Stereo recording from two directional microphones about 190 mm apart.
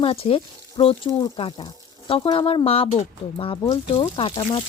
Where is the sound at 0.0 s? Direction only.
30° left (ahead or behind).